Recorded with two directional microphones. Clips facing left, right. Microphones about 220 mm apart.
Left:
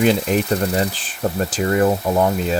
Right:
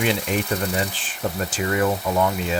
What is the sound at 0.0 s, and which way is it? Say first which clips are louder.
Speech: left 6 dB; 40° left (ahead or behind).